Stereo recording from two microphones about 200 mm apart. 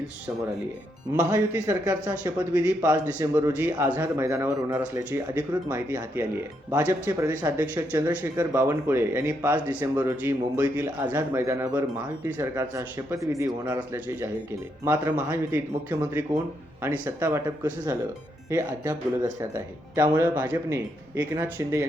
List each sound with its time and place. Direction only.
1.1 s speech: 15° right (ahead or behind)
15.3 s speech: 10° right (ahead or behind)